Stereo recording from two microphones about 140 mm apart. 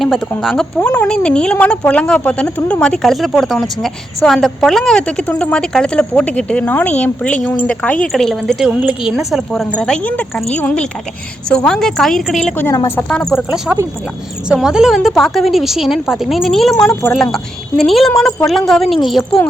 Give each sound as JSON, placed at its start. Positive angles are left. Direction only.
{"t": 0.0, "sound": "a woman's voice", "side_deg": 0}
{"t": 12.5, "sound": "a woman's voice", "side_deg": 20}
{"t": 13.0, "sound": "a woman's voice", "side_deg": 10}
{"t": 14.5, "sound": "speech", "side_deg": -5}